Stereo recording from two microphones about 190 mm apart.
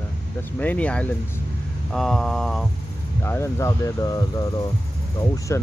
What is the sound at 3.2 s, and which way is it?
Speech, 15° left (ahead or behind).